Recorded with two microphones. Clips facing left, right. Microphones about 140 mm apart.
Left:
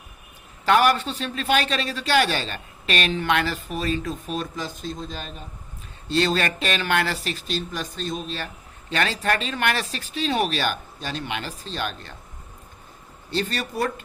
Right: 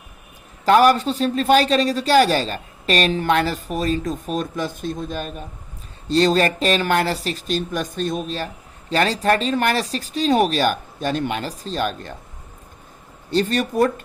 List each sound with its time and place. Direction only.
0.6 s a man's voice: 40° right (ahead or behind)
6.1 s a man's voice: 40° right (ahead or behind)
13.3 s speech: 45° right (ahead or behind)